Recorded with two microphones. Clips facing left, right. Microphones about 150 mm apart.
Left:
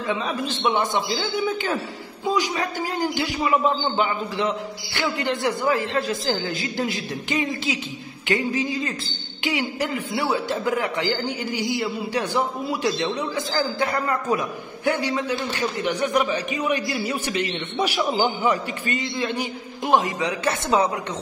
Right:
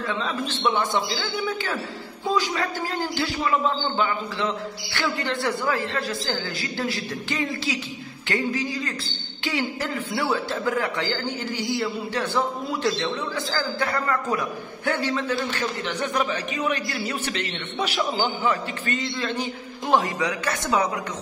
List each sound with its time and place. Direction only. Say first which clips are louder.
0.0 s a man's voice: left 2 dB; 15° left (ahead or behind)